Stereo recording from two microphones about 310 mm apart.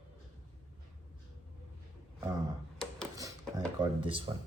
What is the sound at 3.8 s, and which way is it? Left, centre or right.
Speech, centre.